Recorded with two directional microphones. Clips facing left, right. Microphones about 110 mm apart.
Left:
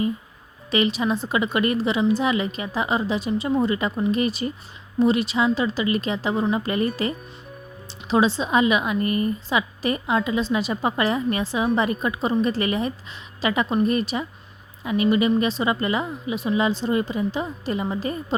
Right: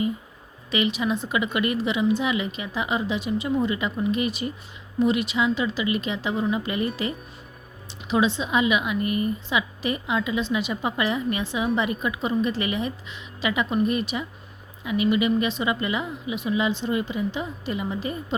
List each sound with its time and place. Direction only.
0.7 s speech: 35° left (ahead or behind)